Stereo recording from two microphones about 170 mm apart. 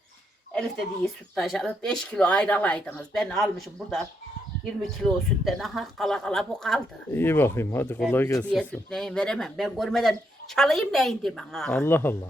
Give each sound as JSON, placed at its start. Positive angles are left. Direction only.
{"t": 0.5, "sound": "speech", "side_deg": 0}
{"t": 7.1, "sound": "speech", "side_deg": 15}
{"t": 8.4, "sound": "speech", "side_deg": 5}